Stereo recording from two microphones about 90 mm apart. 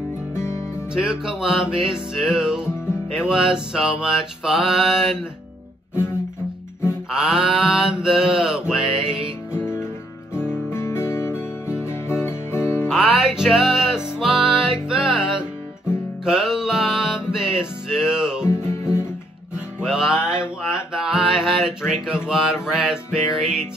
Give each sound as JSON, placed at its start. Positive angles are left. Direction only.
{"t": 0.4, "sound": "music", "side_deg": 30}
{"t": 0.9, "sound": "music", "side_deg": -5}
{"t": 3.5, "sound": "mantra", "side_deg": -5}
{"t": 7.1, "sound": "music", "side_deg": -5}
{"t": 9.5, "sound": "music", "side_deg": 25}
{"t": 12.8, "sound": "music", "side_deg": -5}
{"t": 16.3, "sound": "music", "side_deg": -5}
{"t": 18.5, "sound": "music", "side_deg": 30}
{"t": 19.8, "sound": "music", "side_deg": -5}
{"t": 20.2, "sound": "a sound", "side_deg": -10}
{"t": 22.3, "sound": "mantra", "side_deg": -5}